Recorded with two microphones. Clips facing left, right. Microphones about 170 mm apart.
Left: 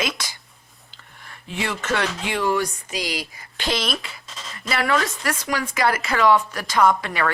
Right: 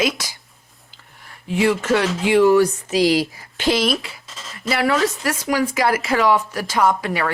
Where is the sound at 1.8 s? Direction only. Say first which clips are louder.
Right 6 dB; 15° right (ahead or behind).